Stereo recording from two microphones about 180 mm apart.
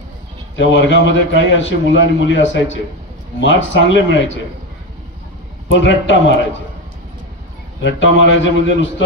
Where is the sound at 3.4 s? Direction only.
90° left.